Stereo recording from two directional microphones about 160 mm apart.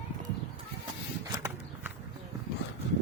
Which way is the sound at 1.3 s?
20° right (ahead or behind).